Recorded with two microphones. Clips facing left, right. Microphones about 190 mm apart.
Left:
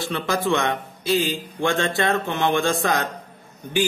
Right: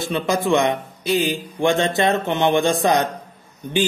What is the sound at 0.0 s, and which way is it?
A man's voice, 15° right (ahead or behind).